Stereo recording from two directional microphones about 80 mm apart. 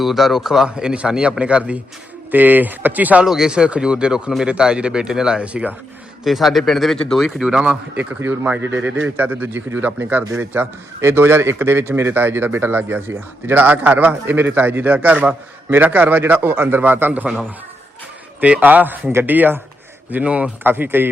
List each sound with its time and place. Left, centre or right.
0.0 s a man's voice: centre; by 3.2 s right
3.2 s speech: centre
6.2 s a man's voice: centre; by 17.2 s right
18.3 s a man's voice: centre